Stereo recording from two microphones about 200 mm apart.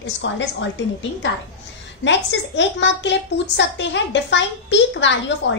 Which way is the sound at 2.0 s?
65° left (ahead or behind).